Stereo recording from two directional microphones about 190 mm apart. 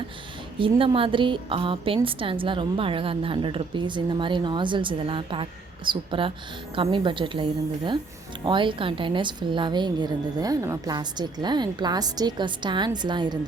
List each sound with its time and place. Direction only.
0.6 s a woman's voice: 30° right (ahead or behind)